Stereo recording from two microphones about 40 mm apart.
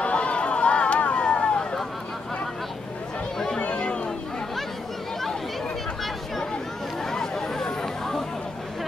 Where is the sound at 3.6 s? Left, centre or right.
Left.